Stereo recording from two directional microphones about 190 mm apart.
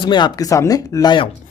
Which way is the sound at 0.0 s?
25° left (ahead or behind).